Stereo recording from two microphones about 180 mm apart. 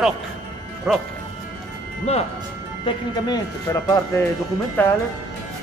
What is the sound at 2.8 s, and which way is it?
Speech, 25° left (ahead or behind).